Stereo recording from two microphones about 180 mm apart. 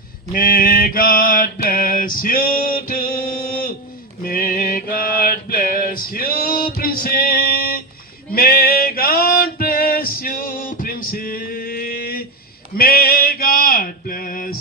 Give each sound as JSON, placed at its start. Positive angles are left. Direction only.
{"t": 0.3, "sound": "mantra", "side_deg": 55}
{"t": 8.3, "sound": "male singing", "side_deg": 55}